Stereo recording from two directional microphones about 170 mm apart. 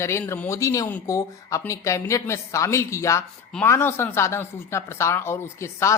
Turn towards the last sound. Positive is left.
turn(degrees=15)  # may be behind; listen again after turning